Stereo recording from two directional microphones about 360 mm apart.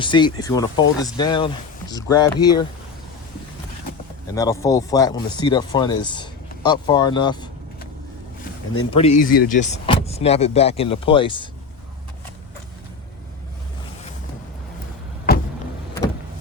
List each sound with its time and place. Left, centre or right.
0.0 s speech: centre
4.4 s speech: centre
8.7 s speech: centre